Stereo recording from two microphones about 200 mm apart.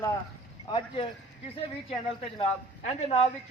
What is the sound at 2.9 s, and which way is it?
Speech, 30° left (ahead or behind).